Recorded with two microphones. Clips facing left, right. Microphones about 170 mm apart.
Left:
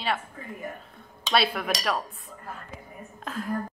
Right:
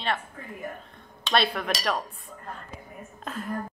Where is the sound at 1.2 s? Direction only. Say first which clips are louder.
Even; 5° left (ahead or behind).